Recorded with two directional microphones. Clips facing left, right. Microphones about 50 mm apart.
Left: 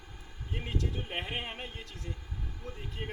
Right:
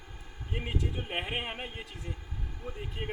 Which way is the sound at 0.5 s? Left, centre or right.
Centre.